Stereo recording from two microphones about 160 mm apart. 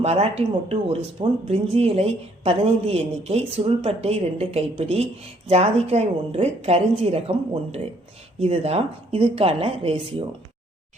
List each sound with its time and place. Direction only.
0.0 s speech: 40° right (ahead or behind)